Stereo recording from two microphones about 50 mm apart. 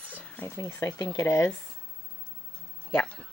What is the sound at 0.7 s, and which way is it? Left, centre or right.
Speech, left.